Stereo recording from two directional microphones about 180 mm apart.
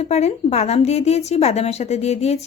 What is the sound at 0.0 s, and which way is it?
Speech, 35° left (ahead or behind).